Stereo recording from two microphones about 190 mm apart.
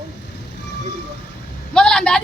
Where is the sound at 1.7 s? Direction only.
5° left (ahead or behind).